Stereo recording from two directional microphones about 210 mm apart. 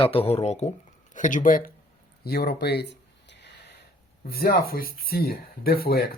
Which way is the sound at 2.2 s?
50° left (ahead or behind).